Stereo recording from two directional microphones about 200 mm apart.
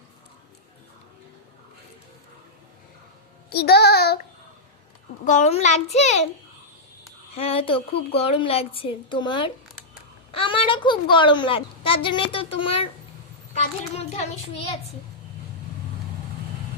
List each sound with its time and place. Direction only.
3.5 s child singing: 55° left (ahead or behind)
5.2 s a child's voice: 40° left (ahead or behind)
7.3 s a child's voice: 30° left (ahead or behind)